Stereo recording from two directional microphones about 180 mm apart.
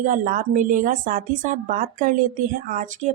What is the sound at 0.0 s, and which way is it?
Speech, 45° right (ahead or behind).